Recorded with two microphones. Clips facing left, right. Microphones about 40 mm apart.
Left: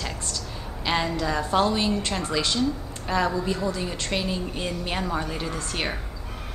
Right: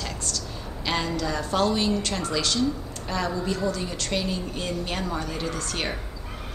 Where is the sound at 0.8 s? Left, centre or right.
Centre.